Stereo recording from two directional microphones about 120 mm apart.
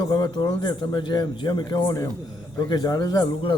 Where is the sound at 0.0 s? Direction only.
40° left (ahead or behind).